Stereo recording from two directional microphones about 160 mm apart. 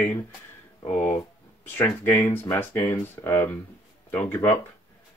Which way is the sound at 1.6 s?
15° left (ahead or behind).